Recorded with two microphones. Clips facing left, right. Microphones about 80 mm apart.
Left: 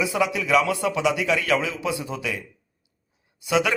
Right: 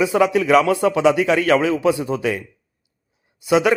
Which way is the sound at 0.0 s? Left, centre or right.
Right.